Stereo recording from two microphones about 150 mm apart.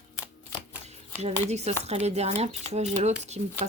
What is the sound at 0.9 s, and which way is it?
Speech, 45° right (ahead or behind).